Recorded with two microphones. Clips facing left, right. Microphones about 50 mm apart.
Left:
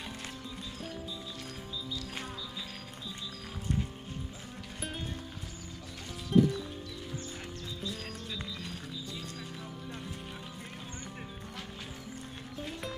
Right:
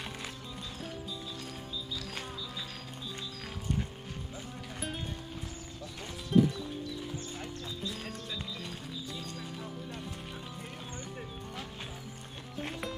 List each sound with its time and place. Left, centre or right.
6.3 s music: centre